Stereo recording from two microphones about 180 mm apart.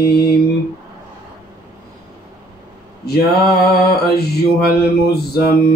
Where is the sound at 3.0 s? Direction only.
60° left (ahead or behind).